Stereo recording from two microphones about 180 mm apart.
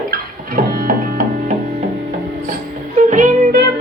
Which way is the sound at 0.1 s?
50° right (ahead or behind).